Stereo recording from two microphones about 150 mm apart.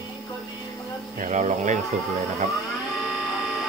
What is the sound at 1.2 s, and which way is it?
Speech, 55° right (ahead or behind).